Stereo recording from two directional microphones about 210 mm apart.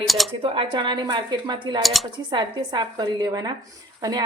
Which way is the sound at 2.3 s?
20° right (ahead or behind).